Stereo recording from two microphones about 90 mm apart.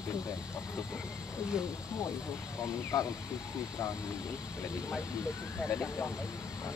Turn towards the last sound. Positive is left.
turn(degrees=25)  # may be behind; listen again after turning